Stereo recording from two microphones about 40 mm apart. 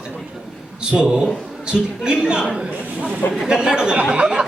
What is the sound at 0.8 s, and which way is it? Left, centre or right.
A man's voice, centre.